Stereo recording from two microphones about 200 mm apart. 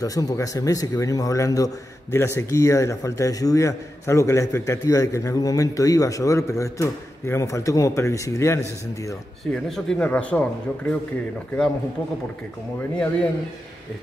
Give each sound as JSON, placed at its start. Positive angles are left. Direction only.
{"t": 0.0, "sound": "speech", "side_deg": 20}
{"t": 9.4, "sound": "speech", "side_deg": 0}
{"t": 12.9, "sound": "speech", "side_deg": 5}